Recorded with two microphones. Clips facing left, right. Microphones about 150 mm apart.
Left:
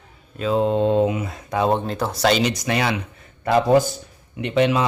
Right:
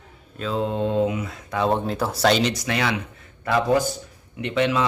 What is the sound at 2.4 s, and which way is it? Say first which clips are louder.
Speech: left 2 dB; 20° left (ahead or behind).